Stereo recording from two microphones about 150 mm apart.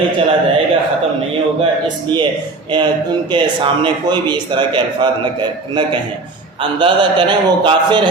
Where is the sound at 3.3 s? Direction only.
35° right (ahead or behind).